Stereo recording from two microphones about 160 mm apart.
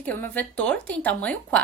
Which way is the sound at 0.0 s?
10° left (ahead or behind).